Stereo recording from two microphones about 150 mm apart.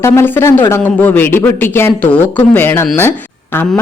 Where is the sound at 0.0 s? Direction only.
15° left (ahead or behind).